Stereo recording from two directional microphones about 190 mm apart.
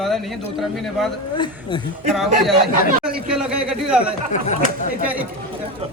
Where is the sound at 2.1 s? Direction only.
Centre (ahead or behind).